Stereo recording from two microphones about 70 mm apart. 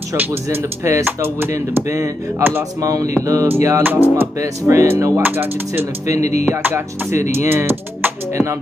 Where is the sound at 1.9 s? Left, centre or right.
Right.